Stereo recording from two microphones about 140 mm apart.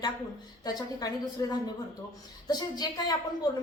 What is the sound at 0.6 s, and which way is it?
A woman's voice, 30° left (ahead or behind).